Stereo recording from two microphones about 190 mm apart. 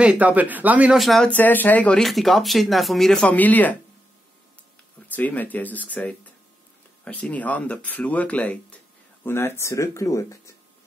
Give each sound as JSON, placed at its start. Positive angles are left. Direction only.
{"t": 0.0, "sound": "speech", "side_deg": -5}
{"t": 5.0, "sound": "speech", "side_deg": 10}